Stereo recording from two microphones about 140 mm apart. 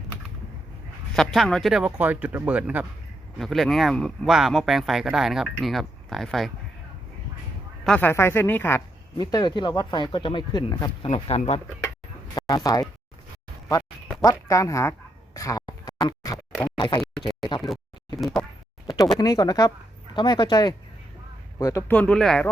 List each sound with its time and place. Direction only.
1.1 s speech: centre (ahead or behind)
3.3 s speech: centre (ahead or behind)
7.9 s speech: 10° left (ahead or behind)
9.1 s speech: 30° left (ahead or behind)
11.0 s speech: 50° left (ahead or behind)
12.3 s a sound: 30° left (ahead or behind)
14.3 s speech: 25° left (ahead or behind)
17.0 s a sound: centre (ahead or behind)
18.2 s speech: centre (ahead or behind)
19.2 s speech: 25° left (ahead or behind)
21.8 s speech: 10° left (ahead or behind)